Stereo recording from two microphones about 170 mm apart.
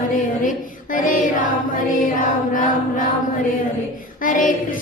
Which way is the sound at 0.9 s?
50° left (ahead or behind).